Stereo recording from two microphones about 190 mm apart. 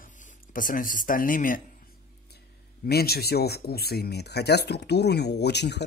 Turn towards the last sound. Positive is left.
turn(degrees=60)  # may be behind; listen again after turning